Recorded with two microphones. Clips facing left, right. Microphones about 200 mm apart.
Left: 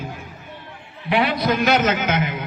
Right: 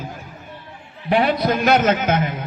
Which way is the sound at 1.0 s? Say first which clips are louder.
Right 2 dB; 40° right (ahead or behind).